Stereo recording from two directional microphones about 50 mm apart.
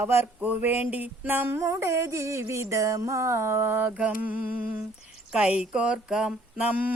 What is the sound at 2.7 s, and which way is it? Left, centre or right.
Mantra, right.